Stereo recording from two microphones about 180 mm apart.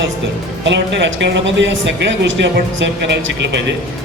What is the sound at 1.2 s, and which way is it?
A man's voice, 90° right.